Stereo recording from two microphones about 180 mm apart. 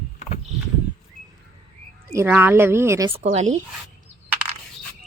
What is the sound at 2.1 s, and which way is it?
Speech, 10° right (ahead or behind).